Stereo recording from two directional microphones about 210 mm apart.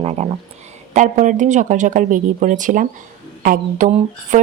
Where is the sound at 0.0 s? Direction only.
30° right (ahead or behind).